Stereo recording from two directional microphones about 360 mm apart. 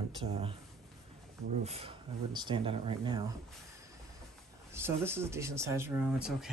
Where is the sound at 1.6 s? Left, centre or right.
Centre.